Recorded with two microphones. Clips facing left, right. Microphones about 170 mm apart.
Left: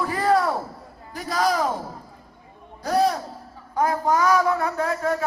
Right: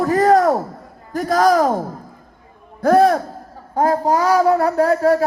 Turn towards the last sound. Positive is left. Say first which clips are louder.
# right 9 dB
turn(degrees=-35)  # may be behind; listen again after turning